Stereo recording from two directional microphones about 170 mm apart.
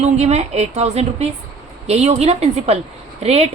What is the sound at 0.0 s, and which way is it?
A woman's voice, 40° right (ahead or behind).